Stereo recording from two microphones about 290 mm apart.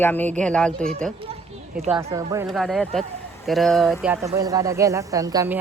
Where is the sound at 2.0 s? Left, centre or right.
Centre.